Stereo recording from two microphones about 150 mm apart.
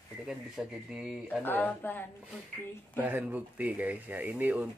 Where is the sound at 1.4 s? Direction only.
10° left (ahead or behind).